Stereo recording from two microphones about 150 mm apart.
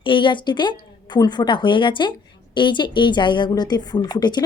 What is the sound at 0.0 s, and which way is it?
A woman's voice, 35° left (ahead or behind).